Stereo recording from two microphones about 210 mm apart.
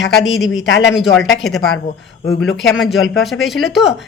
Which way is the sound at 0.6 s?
60° left (ahead or behind).